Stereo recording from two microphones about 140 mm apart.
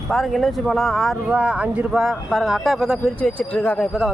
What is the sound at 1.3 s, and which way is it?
Speech, 10° right (ahead or behind).